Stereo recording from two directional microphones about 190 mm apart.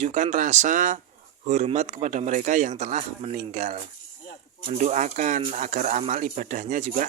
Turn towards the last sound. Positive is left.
turn(degrees=-40)  # may be behind; listen again after turning